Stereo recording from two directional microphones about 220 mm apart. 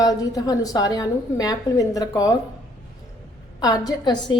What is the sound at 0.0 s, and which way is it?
A woman's voice, 15° left (ahead or behind).